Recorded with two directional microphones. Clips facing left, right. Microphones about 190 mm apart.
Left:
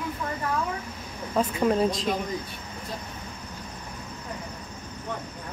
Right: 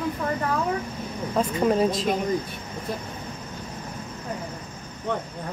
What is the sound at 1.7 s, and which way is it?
Speech, 5° right (ahead or behind).